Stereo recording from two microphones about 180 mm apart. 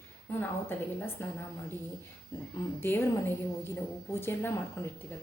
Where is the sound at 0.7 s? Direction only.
10° left (ahead or behind).